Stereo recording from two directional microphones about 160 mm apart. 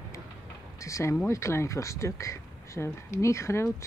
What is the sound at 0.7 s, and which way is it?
Speech, 20° left (ahead or behind).